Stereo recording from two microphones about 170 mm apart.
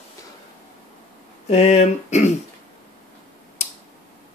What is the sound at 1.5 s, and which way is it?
Speech, 40° left (ahead or behind).